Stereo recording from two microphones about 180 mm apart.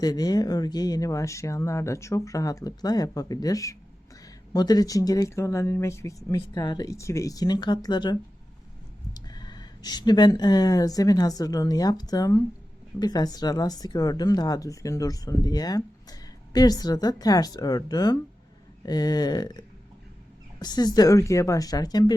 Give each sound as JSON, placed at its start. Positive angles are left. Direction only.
{"t": 0.0, "sound": "speech", "side_deg": 20}